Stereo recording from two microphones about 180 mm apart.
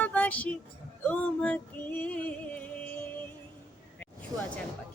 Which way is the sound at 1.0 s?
10° left (ahead or behind).